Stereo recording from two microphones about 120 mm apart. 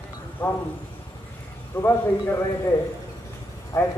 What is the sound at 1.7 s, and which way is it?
Speech, 20° left (ahead or behind).